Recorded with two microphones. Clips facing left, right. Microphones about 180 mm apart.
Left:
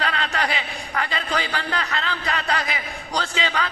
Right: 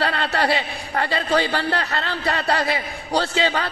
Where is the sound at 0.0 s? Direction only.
35° right (ahead or behind).